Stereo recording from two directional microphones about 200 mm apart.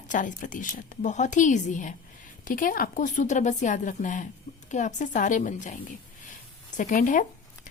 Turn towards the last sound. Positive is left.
turn(degrees=40)  # may be behind; listen again after turning